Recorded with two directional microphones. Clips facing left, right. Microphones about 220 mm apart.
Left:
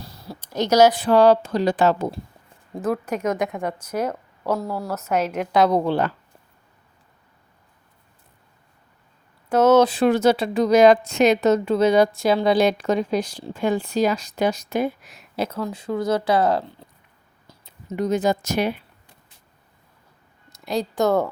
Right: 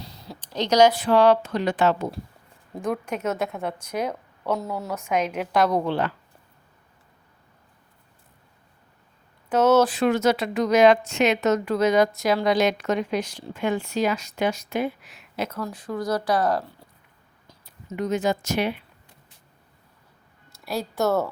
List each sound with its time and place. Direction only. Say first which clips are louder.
0.3 s a sound: left 3 dB; 10° left (ahead or behind)
1.0 s a woman's voice: left 3 dB; 35° left (ahead or behind)
2.7 s a woman's voice: left 3 dB; centre (ahead or behind)
4.1 s a woman's voice: left 2 dB; 5° left (ahead or behind)
5.3 s a woman's voice: left 6 dB; 5° right (ahead or behind)
5.7 s a woman's voice: left 3 dB; 35° left (ahead or behind)
9.5 s a woman's voice: left 3 dB; 10° left (ahead or behind)
9.8 s a woman's voice: left 3 dB; 30° left (ahead or behind)
15.5 s speech: left 4 dB; 25° left (ahead or behind)
17.7 s speech: left 3 dB; 35° left (ahead or behind)
20.5 s speech: left 4 dB; 15° left (ahead or behind)